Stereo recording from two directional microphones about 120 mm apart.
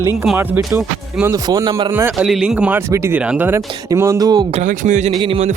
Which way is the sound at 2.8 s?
25° right (ahead or behind).